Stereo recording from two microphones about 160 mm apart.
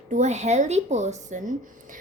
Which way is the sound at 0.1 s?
45° right (ahead or behind).